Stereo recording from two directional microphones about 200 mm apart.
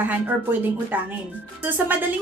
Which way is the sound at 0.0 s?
10° right (ahead or behind).